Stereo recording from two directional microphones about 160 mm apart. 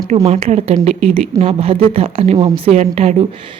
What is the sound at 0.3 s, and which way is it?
A woman's voice, 40° right (ahead or behind).